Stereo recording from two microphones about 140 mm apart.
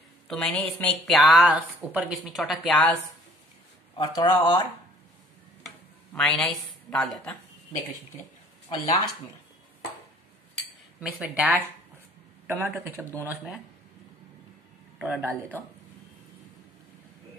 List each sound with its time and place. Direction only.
0.3 s a woman's voice: 5° left (ahead or behind)
1.0 s speech: centre (ahead or behind)
4.0 s speech: 30° left (ahead or behind)
6.1 s a woman's voice: centre (ahead or behind)
8.6 s speech: 50° left (ahead or behind)
11.0 s speech: 10° right (ahead or behind)
15.0 s speech: 5° right (ahead or behind)